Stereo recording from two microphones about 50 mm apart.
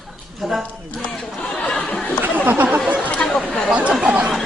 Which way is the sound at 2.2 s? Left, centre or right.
Right.